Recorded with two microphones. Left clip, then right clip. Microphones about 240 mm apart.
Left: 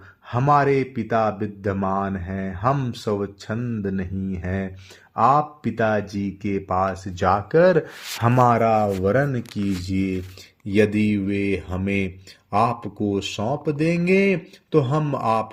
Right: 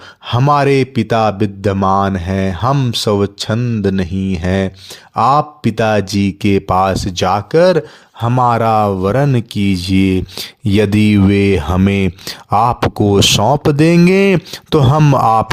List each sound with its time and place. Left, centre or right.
0.3 s speech: right